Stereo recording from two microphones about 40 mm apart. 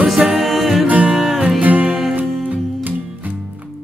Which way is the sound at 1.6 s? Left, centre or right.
Right.